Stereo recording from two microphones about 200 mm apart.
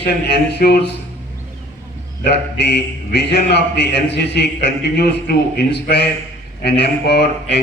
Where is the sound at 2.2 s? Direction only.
55° left (ahead or behind).